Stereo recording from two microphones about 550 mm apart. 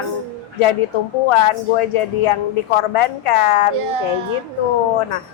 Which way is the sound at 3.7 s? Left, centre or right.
Right.